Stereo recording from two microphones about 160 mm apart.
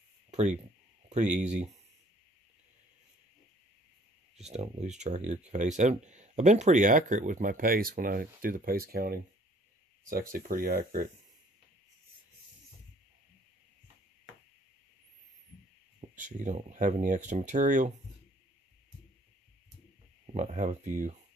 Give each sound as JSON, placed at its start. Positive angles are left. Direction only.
{"t": 0.3, "sound": "a sound", "side_deg": -45}
{"t": 1.0, "sound": "speech", "side_deg": -50}
{"t": 4.4, "sound": "speech", "side_deg": -45}
{"t": 16.2, "sound": "speech", "side_deg": -50}
{"t": 20.3, "sound": "speech", "side_deg": -50}